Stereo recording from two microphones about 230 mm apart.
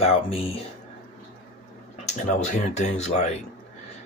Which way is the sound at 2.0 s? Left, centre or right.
Left.